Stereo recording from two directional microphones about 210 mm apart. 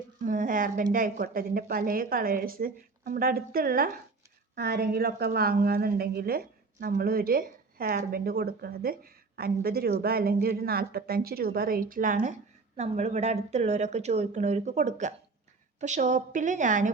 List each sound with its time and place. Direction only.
0.3 s a woman's voice: 40° right (ahead or behind)